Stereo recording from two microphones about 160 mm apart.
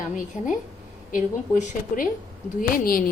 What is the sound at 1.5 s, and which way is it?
Speech, 55° left (ahead or behind).